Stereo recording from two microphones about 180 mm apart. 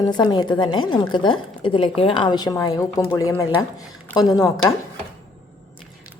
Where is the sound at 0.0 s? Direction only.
25° left (ahead or behind).